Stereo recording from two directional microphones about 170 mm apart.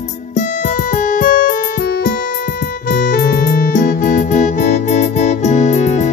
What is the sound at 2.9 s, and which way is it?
Music, 55° left (ahead or behind).